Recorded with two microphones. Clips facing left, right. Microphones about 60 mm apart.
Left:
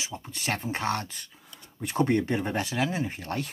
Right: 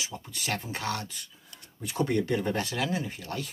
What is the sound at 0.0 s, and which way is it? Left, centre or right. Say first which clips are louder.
Speech: left 2 dB; left.